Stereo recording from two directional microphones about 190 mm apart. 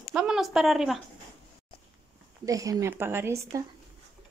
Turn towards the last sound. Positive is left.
turn(degrees=-10)  # may be behind; listen again after turning